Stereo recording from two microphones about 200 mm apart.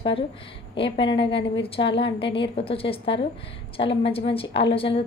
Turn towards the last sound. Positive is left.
turn(degrees=25)  # may be behind; listen again after turning